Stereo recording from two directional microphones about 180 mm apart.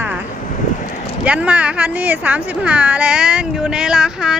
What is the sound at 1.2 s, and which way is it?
A woman's voice, 5° right (ahead or behind).